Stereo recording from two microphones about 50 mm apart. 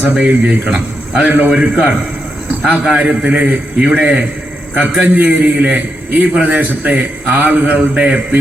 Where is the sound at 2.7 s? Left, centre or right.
Right.